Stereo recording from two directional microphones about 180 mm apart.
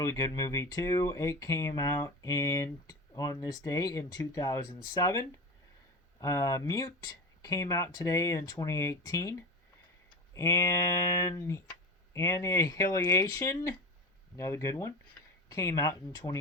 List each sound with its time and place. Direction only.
0.0 s speech: 15° left (ahead or behind)
10.3 s speech: 15° left (ahead or behind)